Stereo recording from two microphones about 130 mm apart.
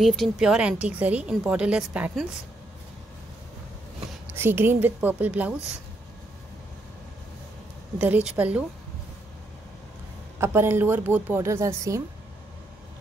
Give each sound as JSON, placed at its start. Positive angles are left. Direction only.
{"t": 0.0, "sound": "a woman's voice", "side_deg": 0}
{"t": 4.3, "sound": "a woman's voice", "side_deg": -15}
{"t": 8.0, "sound": "a woman's voice", "side_deg": -10}
{"t": 10.4, "sound": "a woman's voice", "side_deg": -20}